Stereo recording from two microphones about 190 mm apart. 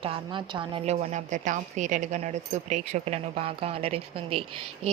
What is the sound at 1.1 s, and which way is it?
Speech, 40° right (ahead or behind).